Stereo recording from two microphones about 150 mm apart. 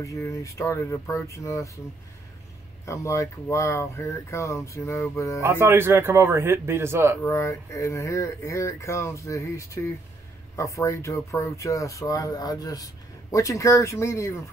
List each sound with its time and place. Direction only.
0.0 s speech: 20° left (ahead or behind)
2.8 s speech: 20° left (ahead or behind)
5.4 s speech: 15° right (ahead or behind)
7.2 s speech: 20° left (ahead or behind)